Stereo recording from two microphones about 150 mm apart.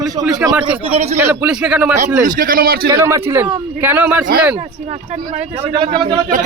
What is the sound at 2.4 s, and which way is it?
Speech, 75° right (ahead or behind).